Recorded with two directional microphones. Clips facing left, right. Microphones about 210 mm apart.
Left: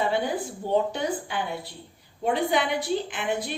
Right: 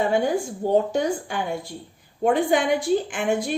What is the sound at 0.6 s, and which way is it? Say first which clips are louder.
A woman's voice: right 4 dB; 45° right (ahead or behind).